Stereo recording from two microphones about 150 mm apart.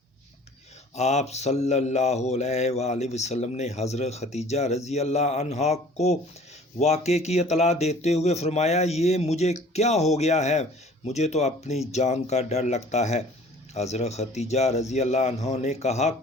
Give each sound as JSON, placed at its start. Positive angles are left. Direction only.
{"t": 0.9, "sound": "speech", "side_deg": 45}